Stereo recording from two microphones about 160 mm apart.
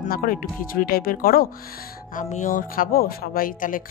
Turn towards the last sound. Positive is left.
turn(degrees=60)  # may be behind; listen again after turning